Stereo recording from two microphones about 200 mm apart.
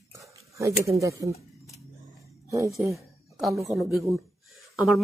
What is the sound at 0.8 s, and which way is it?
Speech, 15° right (ahead or behind).